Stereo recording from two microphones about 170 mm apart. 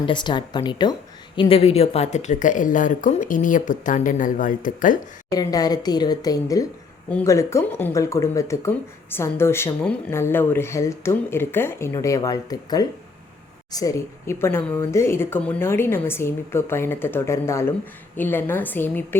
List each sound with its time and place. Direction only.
0.0 s a woman's voice: 25° left (ahead or behind); by 4.9 s 50° left (ahead or behind)
5.3 s a woman's voice: 20° left (ahead or behind)